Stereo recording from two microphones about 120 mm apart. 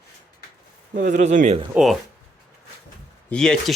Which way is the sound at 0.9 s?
90° right.